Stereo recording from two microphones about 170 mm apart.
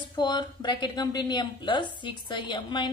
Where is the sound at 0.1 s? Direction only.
25° left (ahead or behind).